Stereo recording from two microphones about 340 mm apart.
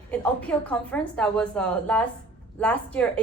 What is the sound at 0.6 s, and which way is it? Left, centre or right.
A woman's voice, centre.